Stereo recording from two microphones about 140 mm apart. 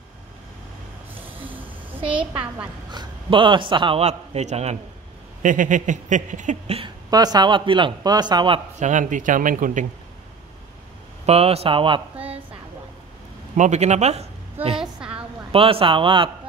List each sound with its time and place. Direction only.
1.2 s a sound: 40° right (ahead or behind)
2.9 s a man's voice: 35° right (ahead or behind)
4.0 s speech: 50° right (ahead or behind)
5.4 s speech: 65° right (ahead or behind)
7.1 s speech: 30° right (ahead or behind)
8.7 s speech: 60° right (ahead or behind)
11.2 s speech: 45° right (ahead or behind)
13.6 s speech: 55° right (ahead or behind)
14.8 s a sound: 5° right (ahead or behind)
15.5 s speech: 40° right (ahead or behind)